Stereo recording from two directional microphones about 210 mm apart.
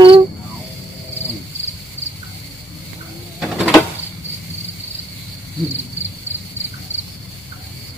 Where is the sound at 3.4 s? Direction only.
Centre (ahead or behind).